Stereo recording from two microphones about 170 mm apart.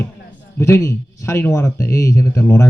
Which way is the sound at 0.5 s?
15° left (ahead or behind).